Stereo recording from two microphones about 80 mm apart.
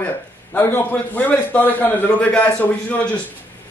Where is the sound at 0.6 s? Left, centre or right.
Left.